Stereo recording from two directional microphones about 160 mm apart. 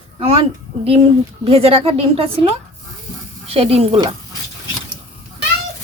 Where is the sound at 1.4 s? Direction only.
40° right (ahead or behind).